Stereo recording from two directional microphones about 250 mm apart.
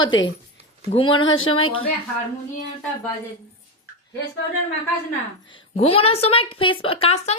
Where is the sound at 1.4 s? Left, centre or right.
Left.